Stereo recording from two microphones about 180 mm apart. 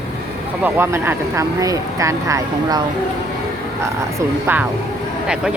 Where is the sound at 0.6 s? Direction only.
15° right (ahead or behind).